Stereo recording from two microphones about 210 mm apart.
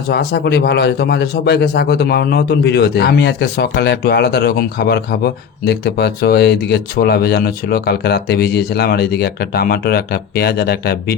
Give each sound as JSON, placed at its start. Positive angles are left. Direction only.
{"t": 0.1, "sound": "a man's voice", "side_deg": 50}